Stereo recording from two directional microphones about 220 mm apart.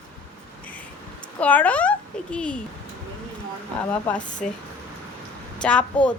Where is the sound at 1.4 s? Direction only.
5° left (ahead or behind).